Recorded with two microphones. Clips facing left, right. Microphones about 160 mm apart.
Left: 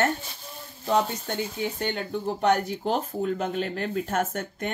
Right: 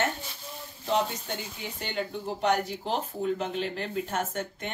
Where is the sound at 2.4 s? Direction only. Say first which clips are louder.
Left 3 dB; 50° left (ahead or behind).